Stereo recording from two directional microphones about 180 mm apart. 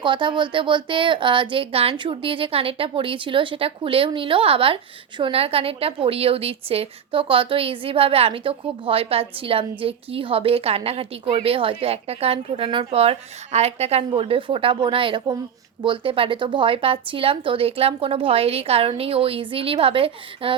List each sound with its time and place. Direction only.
0.0 s speech: 25° right (ahead or behind)